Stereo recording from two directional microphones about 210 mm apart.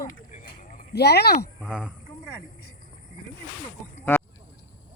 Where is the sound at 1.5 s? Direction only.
5° right (ahead or behind).